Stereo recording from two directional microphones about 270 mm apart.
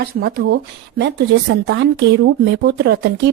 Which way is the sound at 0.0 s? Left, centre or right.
Right.